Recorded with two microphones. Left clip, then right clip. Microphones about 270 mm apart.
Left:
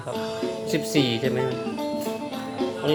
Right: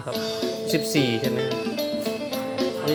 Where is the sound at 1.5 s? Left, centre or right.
Right.